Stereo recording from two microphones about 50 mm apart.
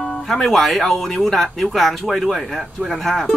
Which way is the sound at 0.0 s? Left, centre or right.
Centre.